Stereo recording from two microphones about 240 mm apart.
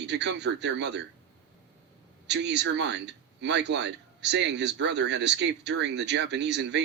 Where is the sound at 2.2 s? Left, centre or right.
Right.